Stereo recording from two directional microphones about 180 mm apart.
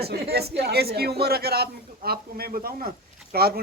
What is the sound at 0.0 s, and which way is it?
Speech, 60° right (ahead or behind).